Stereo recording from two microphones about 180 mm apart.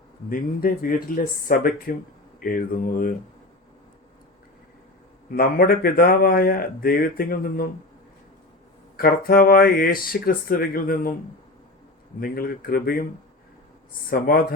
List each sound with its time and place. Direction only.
0.3 s speech: 50° left (ahead or behind)
5.4 s speech: 55° left (ahead or behind)
9.0 s speech: 55° left (ahead or behind)
12.2 s speech: 55° left (ahead or behind)
14.1 s speech: 55° left (ahead or behind)